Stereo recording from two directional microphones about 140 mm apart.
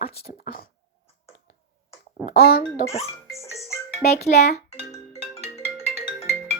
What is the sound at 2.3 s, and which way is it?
Speech, 90° left.